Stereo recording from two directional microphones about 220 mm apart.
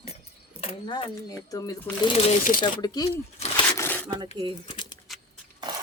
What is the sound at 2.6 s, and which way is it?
Speech, 20° left (ahead or behind).